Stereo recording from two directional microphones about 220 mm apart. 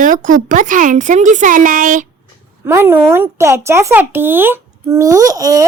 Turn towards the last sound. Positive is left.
turn(degrees=-15)  # may be behind; listen again after turning